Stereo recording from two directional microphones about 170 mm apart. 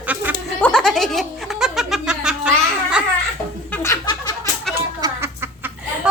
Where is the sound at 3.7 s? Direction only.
15° left (ahead or behind).